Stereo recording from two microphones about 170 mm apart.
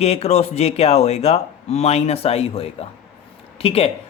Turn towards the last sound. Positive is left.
turn(degrees=35)  # may be behind; listen again after turning